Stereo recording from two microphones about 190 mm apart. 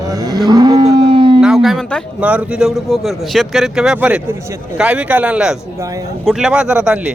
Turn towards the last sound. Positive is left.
turn(degrees=-5)  # may be behind; listen again after turning